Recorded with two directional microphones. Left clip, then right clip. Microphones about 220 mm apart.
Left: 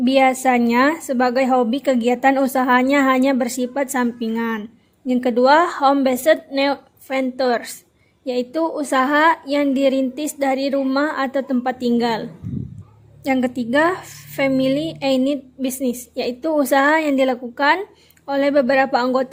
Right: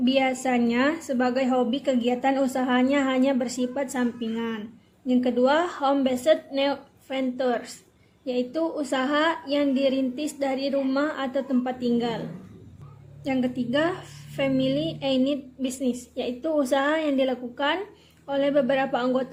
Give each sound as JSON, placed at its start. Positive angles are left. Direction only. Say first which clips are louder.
{"t": 0.0, "sound": "a woman's voice", "louder": "left 8 dB", "side_deg": 35}
{"t": 13.2, "sound": "a woman's voice", "louder": "left 7 dB", "side_deg": 35}